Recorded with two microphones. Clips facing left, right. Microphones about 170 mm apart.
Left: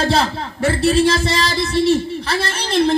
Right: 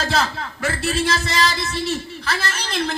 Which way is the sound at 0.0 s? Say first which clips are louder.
Left 5 dB; 30° left (ahead or behind).